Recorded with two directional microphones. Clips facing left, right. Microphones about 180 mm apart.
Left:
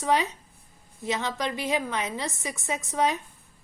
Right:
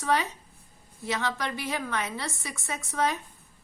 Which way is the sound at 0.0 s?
15° left (ahead or behind).